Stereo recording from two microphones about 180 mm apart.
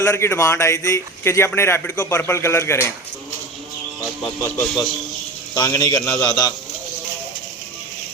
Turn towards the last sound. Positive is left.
turn(degrees=20)  # may be behind; listen again after turning